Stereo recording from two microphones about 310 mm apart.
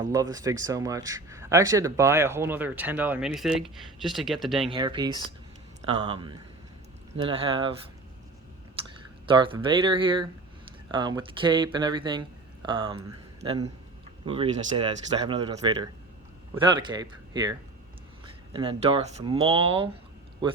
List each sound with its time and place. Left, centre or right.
0.0 s speech: centre
4.7 s speech: centre
8.8 s clicking: centre
9.2 s speech: centre